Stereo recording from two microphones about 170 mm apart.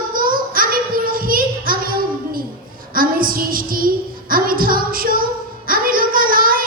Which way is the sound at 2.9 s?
55° right (ahead or behind).